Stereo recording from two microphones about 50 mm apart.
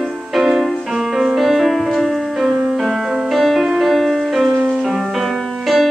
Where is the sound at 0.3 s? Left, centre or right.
Centre.